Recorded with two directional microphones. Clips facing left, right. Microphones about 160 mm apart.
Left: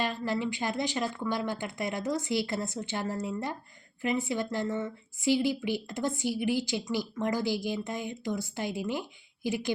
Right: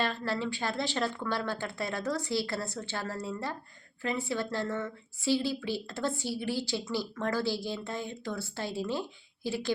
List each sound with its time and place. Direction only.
0.0 s speech: 15° left (ahead or behind)